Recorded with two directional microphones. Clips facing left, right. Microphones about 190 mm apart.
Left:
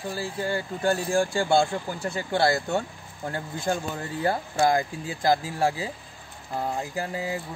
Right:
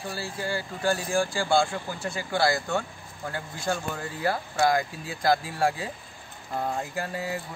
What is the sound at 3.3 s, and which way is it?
Speech, 20° left (ahead or behind).